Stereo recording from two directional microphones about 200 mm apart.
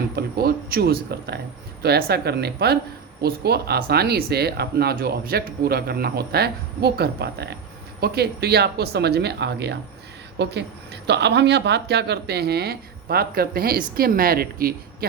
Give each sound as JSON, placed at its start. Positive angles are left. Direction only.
{"t": 0.2, "sound": "speech", "side_deg": -50}